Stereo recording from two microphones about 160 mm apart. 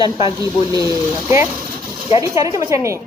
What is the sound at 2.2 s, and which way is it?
Speech, 20° right (ahead or behind).